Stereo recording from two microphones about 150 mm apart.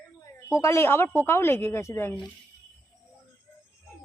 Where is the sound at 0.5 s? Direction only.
20° left (ahead or behind).